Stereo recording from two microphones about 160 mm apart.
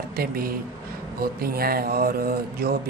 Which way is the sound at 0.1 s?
70° right (ahead or behind).